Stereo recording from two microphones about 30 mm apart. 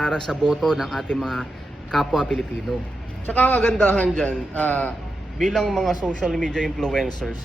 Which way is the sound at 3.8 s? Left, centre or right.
Left.